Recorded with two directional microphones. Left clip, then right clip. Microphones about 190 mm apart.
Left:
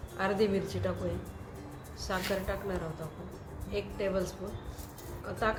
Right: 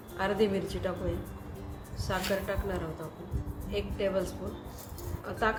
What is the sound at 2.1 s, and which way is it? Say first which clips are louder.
Speech: right 2 dB; 10° right (ahead or behind).